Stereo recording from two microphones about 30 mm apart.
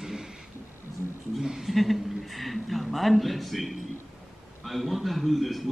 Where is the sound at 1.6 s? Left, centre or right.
Centre.